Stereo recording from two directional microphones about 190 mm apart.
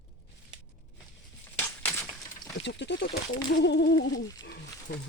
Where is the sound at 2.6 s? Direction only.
70° left (ahead or behind).